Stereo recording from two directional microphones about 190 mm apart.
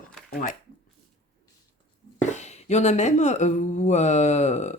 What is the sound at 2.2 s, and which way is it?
Speech, 40° left (ahead or behind).